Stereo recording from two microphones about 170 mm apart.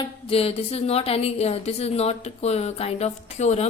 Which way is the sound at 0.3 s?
35° left (ahead or behind).